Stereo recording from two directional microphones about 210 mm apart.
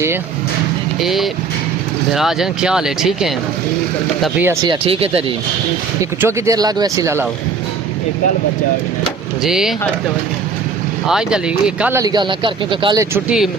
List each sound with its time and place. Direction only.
0.9 s speech: centre (ahead or behind)
4.7 s speech: 25° right (ahead or behind)
6.0 s speech: 15° right (ahead or behind)
9.4 s speech: centre (ahead or behind)
11.0 s speech: 5° right (ahead or behind)